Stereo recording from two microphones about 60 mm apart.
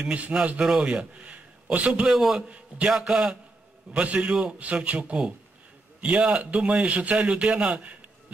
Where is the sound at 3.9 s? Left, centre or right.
Right.